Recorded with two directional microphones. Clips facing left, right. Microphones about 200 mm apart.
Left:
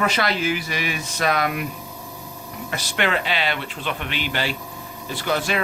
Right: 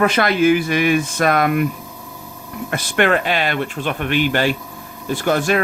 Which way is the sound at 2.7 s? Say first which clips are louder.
Right 7 dB; 50° right (ahead or behind).